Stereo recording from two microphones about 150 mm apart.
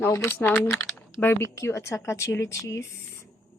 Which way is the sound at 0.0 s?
20° left (ahead or behind).